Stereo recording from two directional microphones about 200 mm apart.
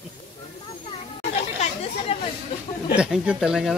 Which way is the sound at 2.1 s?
25° left (ahead or behind).